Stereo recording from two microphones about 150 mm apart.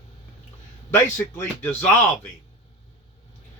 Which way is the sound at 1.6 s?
15° left (ahead or behind).